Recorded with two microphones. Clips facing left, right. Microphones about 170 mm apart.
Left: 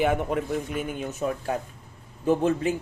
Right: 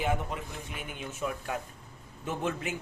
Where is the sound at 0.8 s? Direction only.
40° left (ahead or behind).